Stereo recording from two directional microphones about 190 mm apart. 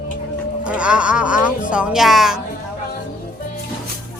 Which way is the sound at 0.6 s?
5° right (ahead or behind).